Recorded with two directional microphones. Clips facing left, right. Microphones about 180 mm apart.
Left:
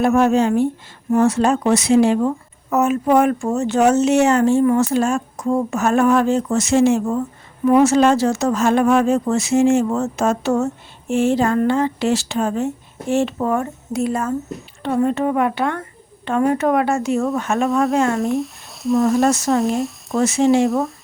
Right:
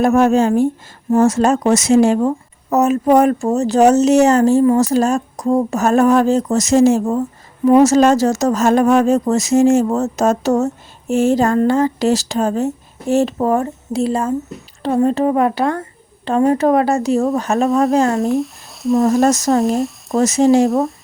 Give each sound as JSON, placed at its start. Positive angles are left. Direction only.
{"t": 0.0, "sound": "speech", "side_deg": -40}
{"t": 18.2, "sound": "speech", "side_deg": 0}
{"t": 19.2, "sound": "speech", "side_deg": -40}
{"t": 19.5, "sound": "speech", "side_deg": 0}
{"t": 20.2, "sound": "speech", "side_deg": -40}
{"t": 20.7, "sound": "speech", "side_deg": 0}